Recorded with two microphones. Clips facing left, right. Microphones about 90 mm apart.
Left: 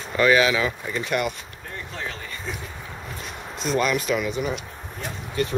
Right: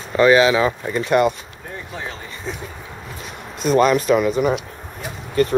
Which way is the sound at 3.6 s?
45° right (ahead or behind).